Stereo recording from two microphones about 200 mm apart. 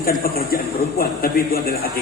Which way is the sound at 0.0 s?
50° left (ahead or behind).